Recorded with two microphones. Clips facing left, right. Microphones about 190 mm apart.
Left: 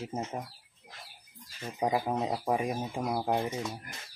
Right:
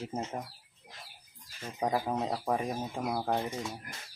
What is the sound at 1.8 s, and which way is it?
Speech, 10° left (ahead or behind).